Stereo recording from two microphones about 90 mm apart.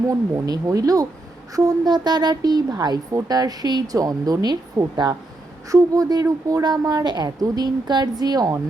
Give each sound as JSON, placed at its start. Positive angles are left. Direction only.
{"t": 0.1, "sound": "a woman's voice", "side_deg": -45}